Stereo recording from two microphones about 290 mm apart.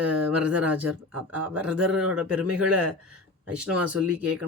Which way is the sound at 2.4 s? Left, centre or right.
Right.